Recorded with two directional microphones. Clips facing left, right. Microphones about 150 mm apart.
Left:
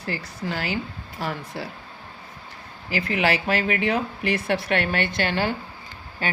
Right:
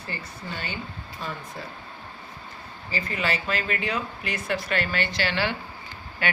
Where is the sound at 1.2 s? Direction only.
75° left (ahead or behind).